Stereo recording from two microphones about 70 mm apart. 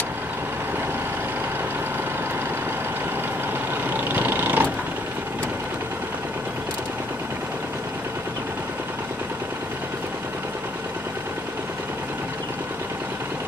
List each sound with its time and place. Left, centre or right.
3.9 s vehicle: right